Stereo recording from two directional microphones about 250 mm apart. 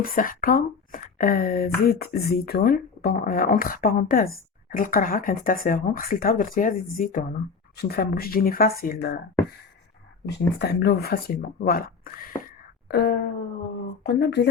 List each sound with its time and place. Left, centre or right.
0.0 s speech: left
10.2 s speech: left